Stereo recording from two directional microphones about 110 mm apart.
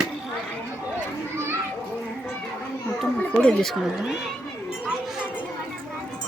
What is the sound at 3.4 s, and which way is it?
Speech, 5° left (ahead or behind).